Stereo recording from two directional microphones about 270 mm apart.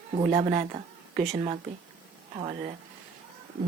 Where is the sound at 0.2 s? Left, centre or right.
Centre.